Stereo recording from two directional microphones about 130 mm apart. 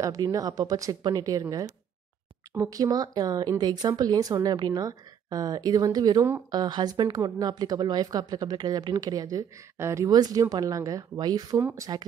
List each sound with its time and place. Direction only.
0.0 s speech: 25° right (ahead or behind)
11.5 s speech: 20° right (ahead or behind)